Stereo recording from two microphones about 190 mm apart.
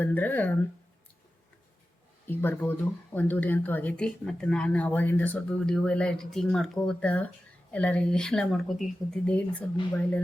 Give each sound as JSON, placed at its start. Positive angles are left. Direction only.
{"t": 0.0, "sound": "speech", "side_deg": 10}
{"t": 2.2, "sound": "speech", "side_deg": 10}